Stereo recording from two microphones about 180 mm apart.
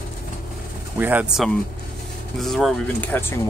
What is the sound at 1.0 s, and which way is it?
Speech, 10° right (ahead or behind).